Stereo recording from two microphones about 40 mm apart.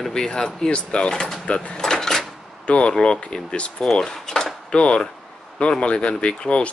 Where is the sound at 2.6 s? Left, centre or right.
Left.